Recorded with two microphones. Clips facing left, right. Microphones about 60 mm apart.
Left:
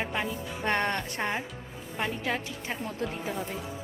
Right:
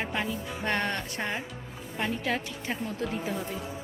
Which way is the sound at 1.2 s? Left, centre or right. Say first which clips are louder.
Left 2 dB; left.